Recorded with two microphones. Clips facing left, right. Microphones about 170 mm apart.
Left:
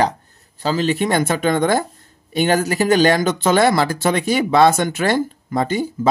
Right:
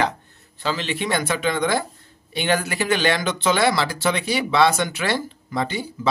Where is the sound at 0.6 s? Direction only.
40° left (ahead or behind).